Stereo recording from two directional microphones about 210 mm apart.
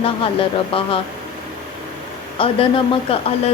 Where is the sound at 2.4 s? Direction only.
25° left (ahead or behind).